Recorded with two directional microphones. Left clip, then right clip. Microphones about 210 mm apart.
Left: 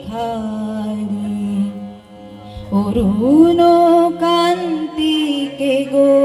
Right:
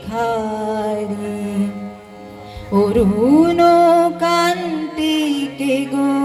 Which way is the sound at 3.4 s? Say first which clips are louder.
Left 1 dB; 50° right (ahead or behind).